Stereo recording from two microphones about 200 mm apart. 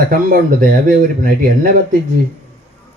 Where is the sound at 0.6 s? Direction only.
45° right (ahead or behind).